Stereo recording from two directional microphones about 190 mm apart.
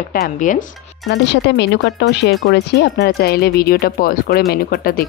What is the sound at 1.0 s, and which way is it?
Speech, 65° left (ahead or behind).